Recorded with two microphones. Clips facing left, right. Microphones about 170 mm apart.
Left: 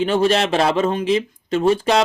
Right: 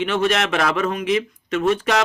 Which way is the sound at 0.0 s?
35° left (ahead or behind).